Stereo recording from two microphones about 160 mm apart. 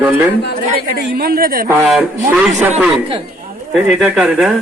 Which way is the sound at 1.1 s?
70° right (ahead or behind).